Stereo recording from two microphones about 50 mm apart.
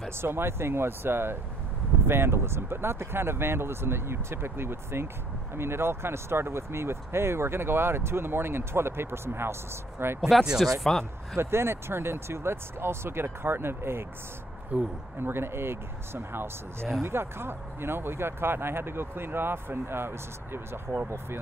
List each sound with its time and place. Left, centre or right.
0.2 s speech: right
10.6 s speech: centre
11.3 s speech: right
14.7 s speech: right
15.1 s speech: right